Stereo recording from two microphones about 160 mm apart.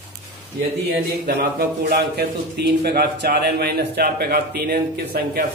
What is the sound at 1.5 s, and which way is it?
A man's voice, 80° right.